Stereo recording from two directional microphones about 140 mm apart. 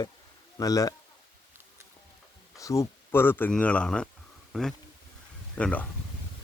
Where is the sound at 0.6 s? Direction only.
25° left (ahead or behind).